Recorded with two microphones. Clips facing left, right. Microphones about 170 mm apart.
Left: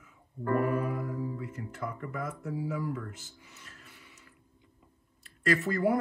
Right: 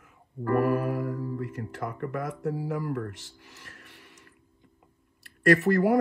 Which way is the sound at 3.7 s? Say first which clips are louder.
Right 3 dB; 70° right (ahead or behind).